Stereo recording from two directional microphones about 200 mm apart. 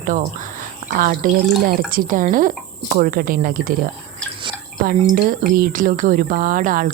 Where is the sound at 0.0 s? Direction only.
40° right (ahead or behind).